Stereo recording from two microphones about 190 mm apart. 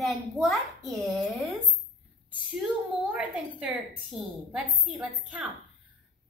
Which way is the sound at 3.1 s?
10° right (ahead or behind).